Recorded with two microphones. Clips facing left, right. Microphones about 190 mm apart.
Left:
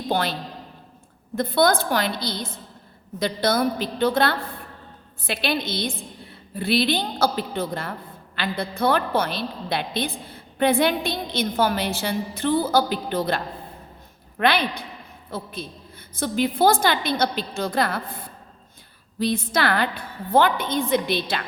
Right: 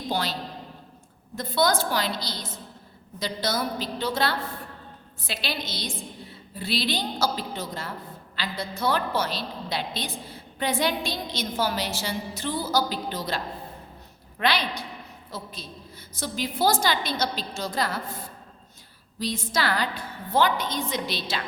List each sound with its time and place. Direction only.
0.1 s a woman's voice: 55° left (ahead or behind)
1.4 s a woman's voice: 55° left (ahead or behind)